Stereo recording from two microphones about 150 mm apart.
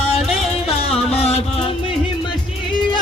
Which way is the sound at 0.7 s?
40° left (ahead or behind).